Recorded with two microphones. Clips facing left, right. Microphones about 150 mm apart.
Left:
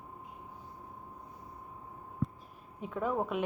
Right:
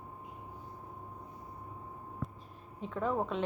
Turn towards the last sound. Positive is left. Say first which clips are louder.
# even
turn(degrees=10)  # may be behind; listen again after turning